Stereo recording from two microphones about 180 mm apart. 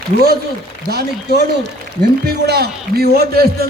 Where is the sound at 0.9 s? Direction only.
65° right (ahead or behind).